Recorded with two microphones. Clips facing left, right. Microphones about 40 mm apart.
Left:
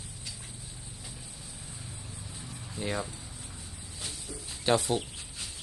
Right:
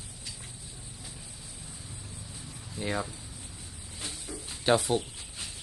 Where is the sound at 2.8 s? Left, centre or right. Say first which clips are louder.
Right 1 dB; centre.